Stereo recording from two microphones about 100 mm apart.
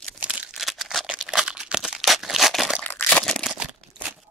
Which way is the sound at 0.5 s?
Centre (ahead or behind).